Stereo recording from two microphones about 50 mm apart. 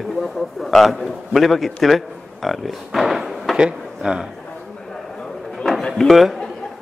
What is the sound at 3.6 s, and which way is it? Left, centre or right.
Speech, centre.